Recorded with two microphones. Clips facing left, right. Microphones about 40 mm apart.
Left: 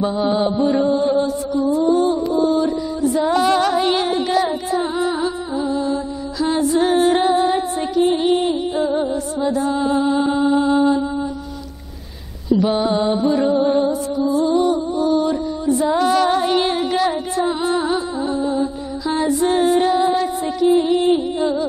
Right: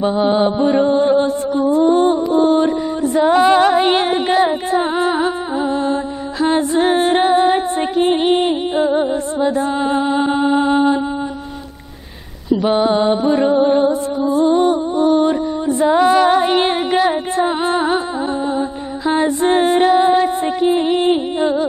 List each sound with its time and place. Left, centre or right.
0.0 s mantra: right
3.3 s music: right
12.6 s music: right
15.9 s music: right